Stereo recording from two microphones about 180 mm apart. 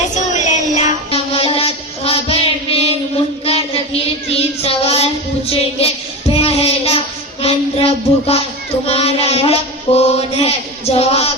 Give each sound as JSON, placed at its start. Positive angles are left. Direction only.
{"t": 0.3, "sound": "music", "side_deg": 40}
{"t": 3.4, "sound": "child singing", "side_deg": 30}
{"t": 5.5, "sound": "music", "side_deg": 35}
{"t": 6.3, "sound": "child singing", "side_deg": 35}
{"t": 7.4, "sound": "a sound", "side_deg": 35}
{"t": 8.9, "sound": "mantra", "side_deg": 35}
{"t": 10.9, "sound": "music", "side_deg": 35}